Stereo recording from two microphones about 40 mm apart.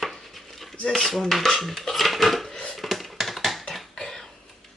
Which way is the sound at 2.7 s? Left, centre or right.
Centre.